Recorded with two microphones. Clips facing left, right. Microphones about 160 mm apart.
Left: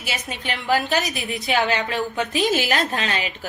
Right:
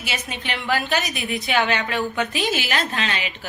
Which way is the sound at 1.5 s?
35° left (ahead or behind).